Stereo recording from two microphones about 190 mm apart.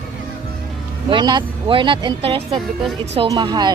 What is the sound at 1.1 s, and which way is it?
Speech, 20° right (ahead or behind).